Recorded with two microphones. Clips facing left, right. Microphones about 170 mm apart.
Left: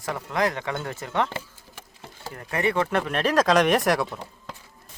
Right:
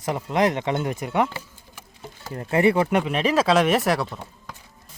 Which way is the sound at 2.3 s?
25° right (ahead or behind).